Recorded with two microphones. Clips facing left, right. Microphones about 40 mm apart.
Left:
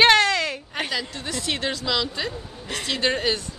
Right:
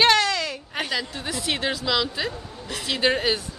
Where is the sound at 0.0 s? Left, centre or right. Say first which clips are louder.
Left 3 dB; left.